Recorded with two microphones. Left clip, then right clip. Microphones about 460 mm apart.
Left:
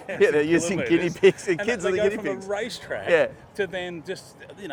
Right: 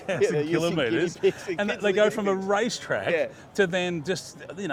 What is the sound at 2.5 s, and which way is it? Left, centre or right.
Speech, right.